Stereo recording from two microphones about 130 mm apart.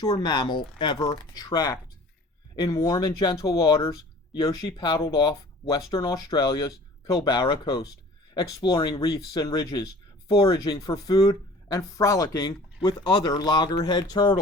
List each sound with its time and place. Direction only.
0.0 s speech: 35° left (ahead or behind)